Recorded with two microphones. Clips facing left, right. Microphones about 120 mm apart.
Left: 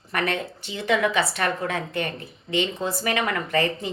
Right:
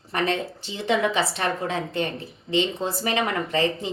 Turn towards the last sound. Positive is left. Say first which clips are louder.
# even
turn(degrees=-20)  # may be behind; listen again after turning